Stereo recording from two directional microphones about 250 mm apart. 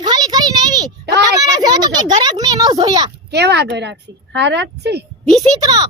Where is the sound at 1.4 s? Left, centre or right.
Centre.